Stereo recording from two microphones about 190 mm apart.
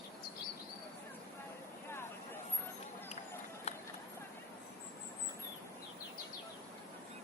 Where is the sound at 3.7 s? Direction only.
35° left (ahead or behind).